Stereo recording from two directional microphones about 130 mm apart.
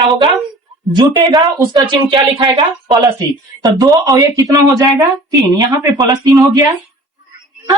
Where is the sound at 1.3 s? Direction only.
35° right (ahead or behind).